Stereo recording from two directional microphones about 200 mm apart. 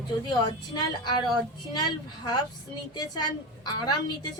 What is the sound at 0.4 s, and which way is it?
A woman's voice, 20° left (ahead or behind).